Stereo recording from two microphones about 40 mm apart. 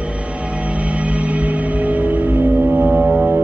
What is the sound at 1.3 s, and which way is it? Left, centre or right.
Music, right.